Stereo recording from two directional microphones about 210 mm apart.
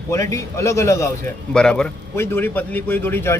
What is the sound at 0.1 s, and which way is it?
A man's voice, 15° left (ahead or behind).